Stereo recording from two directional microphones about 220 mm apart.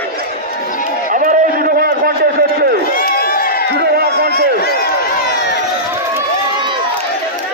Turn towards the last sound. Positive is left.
turn(degrees=-20)  # may be behind; listen again after turning